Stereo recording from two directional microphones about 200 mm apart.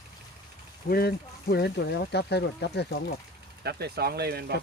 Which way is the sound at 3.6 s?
50° right (ahead or behind).